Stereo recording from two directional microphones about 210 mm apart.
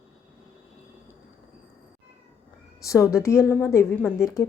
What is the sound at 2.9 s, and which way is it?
A woman's voice, 15° left (ahead or behind).